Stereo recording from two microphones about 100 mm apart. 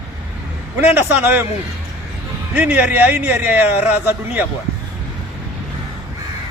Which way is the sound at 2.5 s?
15° right (ahead or behind).